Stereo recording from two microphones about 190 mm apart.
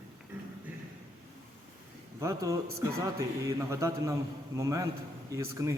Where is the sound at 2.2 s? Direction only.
15° right (ahead or behind).